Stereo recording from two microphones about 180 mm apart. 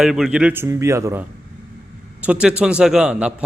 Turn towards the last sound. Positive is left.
turn(degrees=-5)  # may be behind; listen again after turning